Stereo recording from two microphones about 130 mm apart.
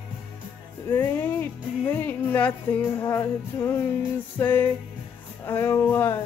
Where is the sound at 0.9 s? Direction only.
15° left (ahead or behind).